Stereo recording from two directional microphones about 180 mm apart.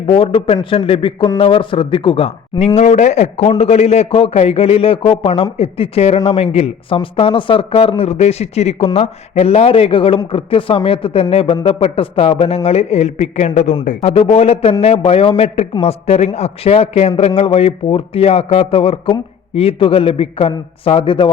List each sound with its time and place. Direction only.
0.0 s a man's voice: 30° left (ahead or behind)